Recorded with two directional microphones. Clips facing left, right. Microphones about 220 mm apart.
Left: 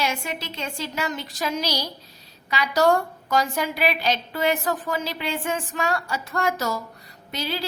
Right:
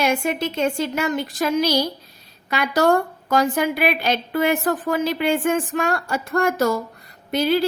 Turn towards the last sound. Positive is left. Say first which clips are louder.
# right 11 dB
turn(degrees=-55)  # may be behind; listen again after turning